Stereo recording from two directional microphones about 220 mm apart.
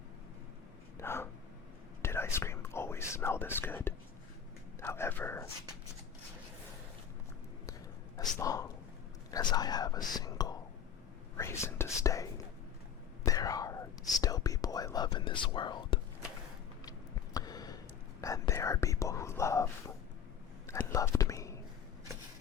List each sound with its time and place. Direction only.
0.9 s speech: 10° left (ahead or behind)
2.0 s whispering: 10° left (ahead or behind)
4.8 s speech: 10° left (ahead or behind)
7.7 s a sound: 15° left (ahead or behind)
8.4 s speech: 15° left (ahead or behind)
9.3 s whispering: 20° left (ahead or behind)
11.3 s speech: 10° left (ahead or behind)
13.2 s whispering: 15° left (ahead or behind)
17.3 s a sound: 15° left (ahead or behind)
18.2 s speech: 15° left (ahead or behind)
20.7 s whispering: 10° left (ahead or behind)